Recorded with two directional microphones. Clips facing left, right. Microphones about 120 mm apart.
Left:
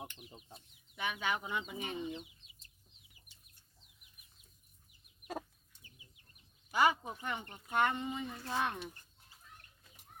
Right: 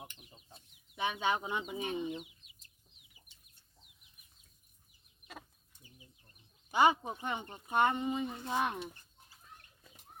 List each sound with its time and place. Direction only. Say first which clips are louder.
0.9 s speech: right 4 dB; 25° right (ahead or behind)
3.3 s chicken: left 1 dB; centre (ahead or behind)
6.7 s speech: right 3 dB; 20° right (ahead or behind)